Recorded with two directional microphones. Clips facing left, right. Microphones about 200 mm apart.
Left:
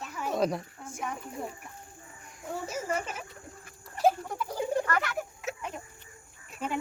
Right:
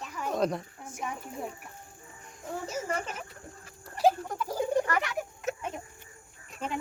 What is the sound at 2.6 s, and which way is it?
Speech, 10° left (ahead or behind).